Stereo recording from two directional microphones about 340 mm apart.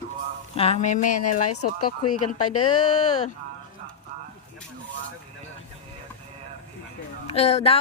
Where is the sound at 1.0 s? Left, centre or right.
Left.